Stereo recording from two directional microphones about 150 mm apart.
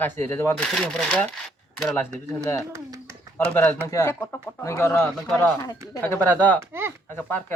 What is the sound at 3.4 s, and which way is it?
Speech, 15° left (ahead or behind).